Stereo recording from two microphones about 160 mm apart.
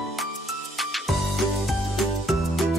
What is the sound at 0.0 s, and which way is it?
Music, centre (ahead or behind).